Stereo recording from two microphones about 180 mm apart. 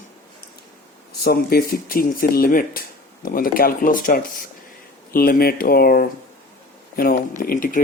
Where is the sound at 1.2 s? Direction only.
60° left (ahead or behind).